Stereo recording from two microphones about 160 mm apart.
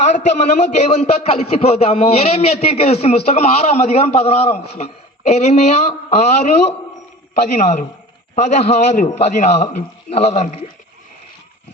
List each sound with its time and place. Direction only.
0.3 s a man's voice: 45° left (ahead or behind)